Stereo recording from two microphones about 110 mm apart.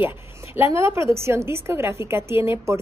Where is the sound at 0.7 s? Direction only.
25° right (ahead or behind).